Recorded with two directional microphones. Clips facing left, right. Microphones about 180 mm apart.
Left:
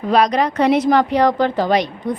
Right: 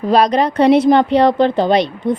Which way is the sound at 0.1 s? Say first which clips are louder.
Right 2 dB; 30° right (ahead or behind).